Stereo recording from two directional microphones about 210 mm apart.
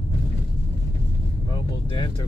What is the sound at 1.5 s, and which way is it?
Speech, 20° left (ahead or behind).